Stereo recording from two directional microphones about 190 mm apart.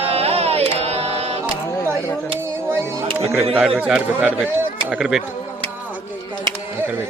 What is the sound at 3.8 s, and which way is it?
Speech, 5° right (ahead or behind).